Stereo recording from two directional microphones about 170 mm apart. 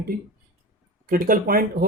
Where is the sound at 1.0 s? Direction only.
55° right (ahead or behind).